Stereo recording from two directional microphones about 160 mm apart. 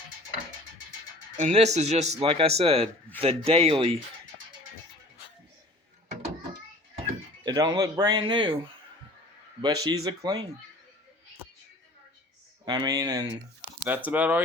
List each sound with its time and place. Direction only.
1.4 s speech: 45° right (ahead or behind)
7.4 s speech: 25° right (ahead or behind)
9.6 s speech: 25° right (ahead or behind)
12.6 s speech: 25° right (ahead or behind)
13.8 s speech: 10° right (ahead or behind)